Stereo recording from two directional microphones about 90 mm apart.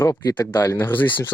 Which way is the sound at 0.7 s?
20° left (ahead or behind).